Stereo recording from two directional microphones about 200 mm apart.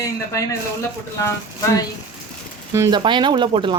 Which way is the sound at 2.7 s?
20° right (ahead or behind).